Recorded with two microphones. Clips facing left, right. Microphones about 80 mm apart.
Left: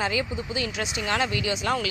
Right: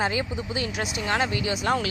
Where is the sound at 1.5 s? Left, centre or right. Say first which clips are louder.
Right 1 dB; right.